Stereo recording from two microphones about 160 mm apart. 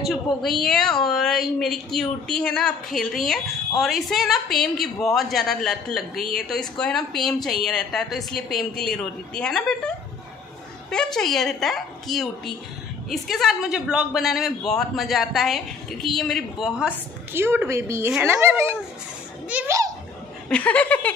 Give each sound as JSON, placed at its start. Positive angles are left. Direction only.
{"t": 0.0, "sound": "a woman's voice", "side_deg": 0}
{"t": 20.4, "sound": "speech", "side_deg": 5}